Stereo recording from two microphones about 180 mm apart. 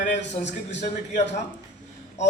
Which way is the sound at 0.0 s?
40° left (ahead or behind).